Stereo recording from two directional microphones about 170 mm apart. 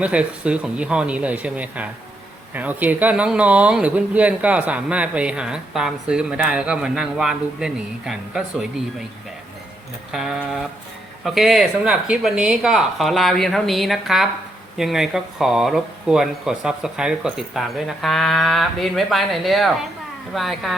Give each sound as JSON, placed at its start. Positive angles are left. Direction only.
{"t": 0.0, "sound": "speech", "side_deg": -5}
{"t": 10.1, "sound": "speech", "side_deg": 0}